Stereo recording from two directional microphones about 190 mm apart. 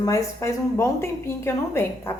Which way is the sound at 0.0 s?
15° left (ahead or behind).